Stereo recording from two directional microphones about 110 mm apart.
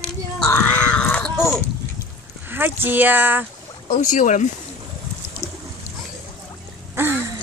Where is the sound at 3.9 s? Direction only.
90° left.